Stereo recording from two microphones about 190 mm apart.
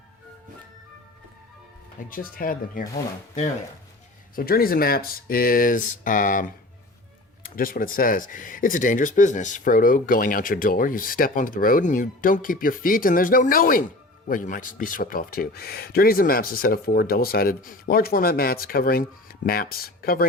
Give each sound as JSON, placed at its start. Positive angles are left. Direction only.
{"t": 2.0, "sound": "speech", "side_deg": 45}
{"t": 4.4, "sound": "speech", "side_deg": 50}